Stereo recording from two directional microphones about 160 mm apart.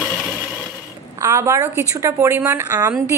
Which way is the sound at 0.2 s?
Centre (ahead or behind).